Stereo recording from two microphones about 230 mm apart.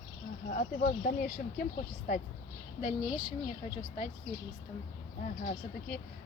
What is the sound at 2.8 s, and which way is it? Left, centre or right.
Speech, left.